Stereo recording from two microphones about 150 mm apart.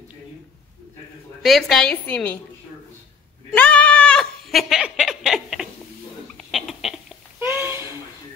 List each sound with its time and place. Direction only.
1.4 s a woman's voice: centre (ahead or behind)
3.5 s goat: 10° left (ahead or behind)
6.3 s rodents: centre (ahead or behind)
7.3 s a sound: 15° right (ahead or behind)